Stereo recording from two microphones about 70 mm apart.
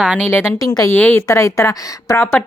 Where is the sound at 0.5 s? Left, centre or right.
Left.